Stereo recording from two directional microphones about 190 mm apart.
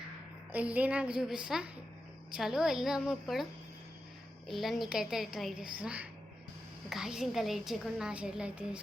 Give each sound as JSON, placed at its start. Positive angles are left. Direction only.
{"t": 0.5, "sound": "a woman's voice", "side_deg": -10}
{"t": 4.4, "sound": "a woman's voice", "side_deg": 0}